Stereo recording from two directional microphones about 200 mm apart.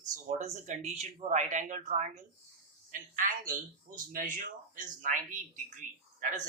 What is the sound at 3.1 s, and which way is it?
Speech, 45° right (ahead or behind).